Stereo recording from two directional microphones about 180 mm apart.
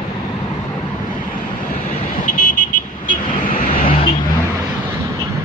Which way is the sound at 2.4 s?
45° left (ahead or behind).